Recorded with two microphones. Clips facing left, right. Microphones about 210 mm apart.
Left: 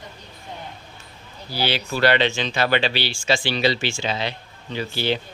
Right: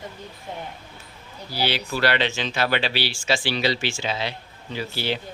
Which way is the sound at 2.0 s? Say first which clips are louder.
Left 4 dB; 5° right (ahead or behind).